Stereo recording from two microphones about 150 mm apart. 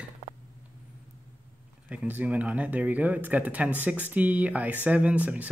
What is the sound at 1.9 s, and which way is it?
Speech, 10° right (ahead or behind).